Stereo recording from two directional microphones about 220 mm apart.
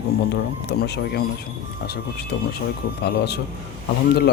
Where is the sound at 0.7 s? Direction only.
50° left (ahead or behind).